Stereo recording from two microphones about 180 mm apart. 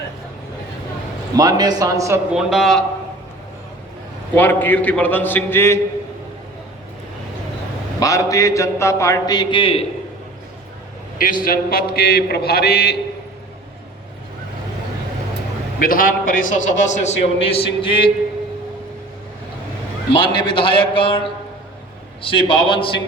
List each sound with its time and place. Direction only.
1.4 s speech: 20° right (ahead or behind)
2.3 s a man's voice: centre (ahead or behind)
4.4 s a man's voice: 10° left (ahead or behind)
7.9 s a man's voice: 20° left (ahead or behind)
11.2 s a man's voice: 50° left (ahead or behind)
15.8 s a man's voice: 50° left (ahead or behind); by 18.1 s 30° left (ahead or behind)
20.1 s a man's voice: 30° left (ahead or behind)
22.2 s a man's voice: 30° left (ahead or behind)